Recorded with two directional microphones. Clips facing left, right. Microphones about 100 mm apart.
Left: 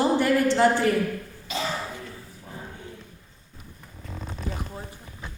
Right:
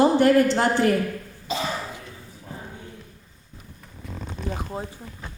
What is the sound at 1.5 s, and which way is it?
Speech, 30° right (ahead or behind).